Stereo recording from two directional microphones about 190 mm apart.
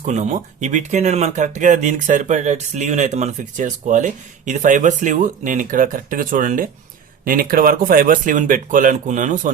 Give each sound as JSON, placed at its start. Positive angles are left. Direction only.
{"t": 0.0, "sound": "speech", "side_deg": -35}